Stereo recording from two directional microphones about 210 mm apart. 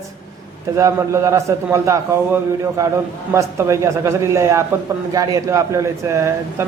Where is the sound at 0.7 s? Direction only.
15° right (ahead or behind).